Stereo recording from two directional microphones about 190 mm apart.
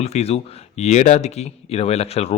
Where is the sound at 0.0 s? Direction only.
35° left (ahead or behind).